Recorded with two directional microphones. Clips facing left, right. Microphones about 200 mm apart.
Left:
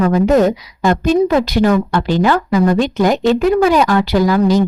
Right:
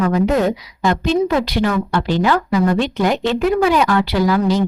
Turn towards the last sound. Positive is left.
turn(degrees=40)  # may be behind; listen again after turning